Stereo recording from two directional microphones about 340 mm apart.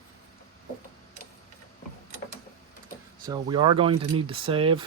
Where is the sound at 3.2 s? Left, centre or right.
Centre.